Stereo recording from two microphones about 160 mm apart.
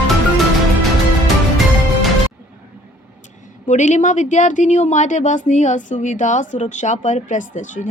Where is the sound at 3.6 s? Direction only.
50° left (ahead or behind).